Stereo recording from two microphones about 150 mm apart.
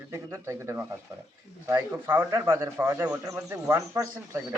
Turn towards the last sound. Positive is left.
turn(degrees=-20)  # may be behind; listen again after turning